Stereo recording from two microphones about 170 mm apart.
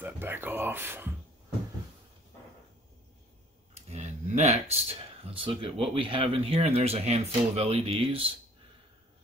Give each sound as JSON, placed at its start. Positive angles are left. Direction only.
{"t": 0.0, "sound": "speech", "side_deg": -10}
{"t": 3.9, "sound": "speech", "side_deg": -40}